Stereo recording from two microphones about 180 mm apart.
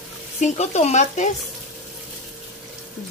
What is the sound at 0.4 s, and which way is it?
Speech, 40° left (ahead or behind).